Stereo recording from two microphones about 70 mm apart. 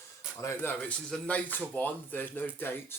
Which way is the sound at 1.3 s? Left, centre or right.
Left.